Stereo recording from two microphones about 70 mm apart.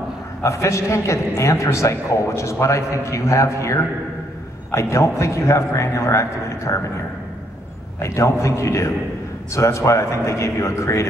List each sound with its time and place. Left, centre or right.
0.4 s a man's voice: left
8.0 s a man's voice: left